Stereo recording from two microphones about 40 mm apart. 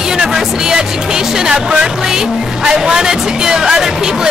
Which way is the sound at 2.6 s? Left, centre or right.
Centre.